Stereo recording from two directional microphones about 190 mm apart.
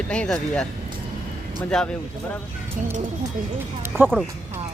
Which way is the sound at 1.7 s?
5° left (ahead or behind).